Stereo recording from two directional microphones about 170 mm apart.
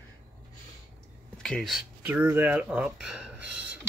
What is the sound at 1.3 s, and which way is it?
Speech, 5° left (ahead or behind).